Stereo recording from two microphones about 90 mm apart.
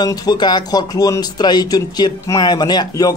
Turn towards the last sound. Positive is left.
turn(degrees=45)  # may be behind; listen again after turning